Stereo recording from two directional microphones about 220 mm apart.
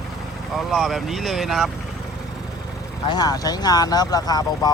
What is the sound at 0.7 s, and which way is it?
Speech, centre (ahead or behind).